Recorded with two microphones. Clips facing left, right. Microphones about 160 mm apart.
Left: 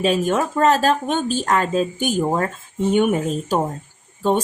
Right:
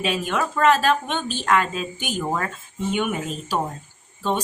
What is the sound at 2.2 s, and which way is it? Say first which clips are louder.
Speech: left 3 dB; 30° left (ahead or behind).